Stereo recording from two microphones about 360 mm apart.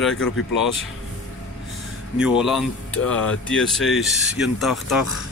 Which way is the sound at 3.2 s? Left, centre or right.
Left.